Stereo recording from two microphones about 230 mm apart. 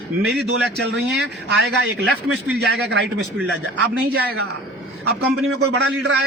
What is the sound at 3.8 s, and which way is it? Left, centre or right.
Speech, right.